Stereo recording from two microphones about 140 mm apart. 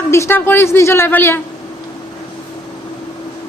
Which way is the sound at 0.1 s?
20° left (ahead or behind).